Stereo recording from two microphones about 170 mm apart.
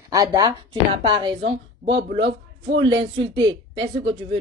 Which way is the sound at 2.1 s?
90° right.